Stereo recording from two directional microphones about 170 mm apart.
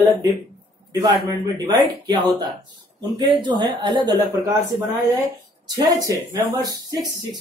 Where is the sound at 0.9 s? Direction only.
20° right (ahead or behind).